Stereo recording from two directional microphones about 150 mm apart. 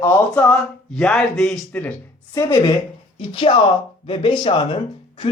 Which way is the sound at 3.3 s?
35° left (ahead or behind).